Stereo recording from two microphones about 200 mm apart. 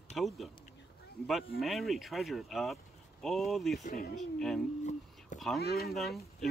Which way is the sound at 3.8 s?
45° left (ahead or behind).